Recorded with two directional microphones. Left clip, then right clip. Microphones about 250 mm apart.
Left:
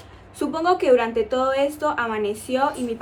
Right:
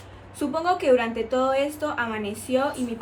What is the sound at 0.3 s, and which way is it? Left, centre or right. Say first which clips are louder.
A woman's voice: left 3 dB; centre.